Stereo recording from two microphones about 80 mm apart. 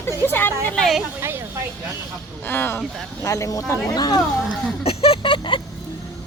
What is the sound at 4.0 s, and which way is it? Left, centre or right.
Speech, left.